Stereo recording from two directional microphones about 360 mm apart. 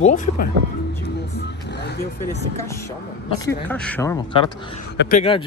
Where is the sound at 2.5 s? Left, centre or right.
Centre.